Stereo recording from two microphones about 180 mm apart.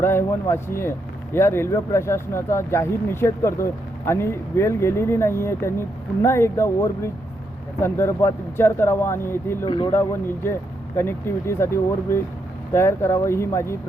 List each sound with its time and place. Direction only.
0.0 s speech: 15° left (ahead or behind)
9.6 s speech: 25° left (ahead or behind)
9.9 s speech: 10° left (ahead or behind)